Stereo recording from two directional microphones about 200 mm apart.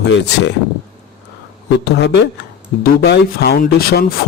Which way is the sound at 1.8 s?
60° left (ahead or behind).